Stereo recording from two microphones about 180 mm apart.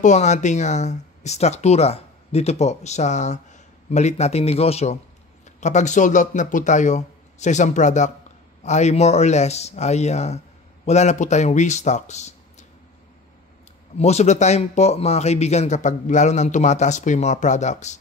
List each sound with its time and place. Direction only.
0.0 s speech: 40° left (ahead or behind)
13.9 s speech: 35° left (ahead or behind)